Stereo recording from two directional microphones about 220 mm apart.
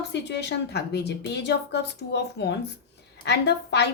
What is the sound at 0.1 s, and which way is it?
A woman's voice, 50° left (ahead or behind).